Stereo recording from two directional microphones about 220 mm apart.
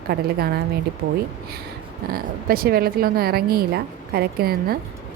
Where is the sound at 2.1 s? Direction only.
45° right (ahead or behind).